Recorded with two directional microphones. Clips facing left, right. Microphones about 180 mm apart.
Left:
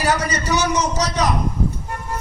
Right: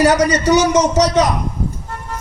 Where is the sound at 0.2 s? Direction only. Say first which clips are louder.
Right 8 dB; 75° right (ahead or behind).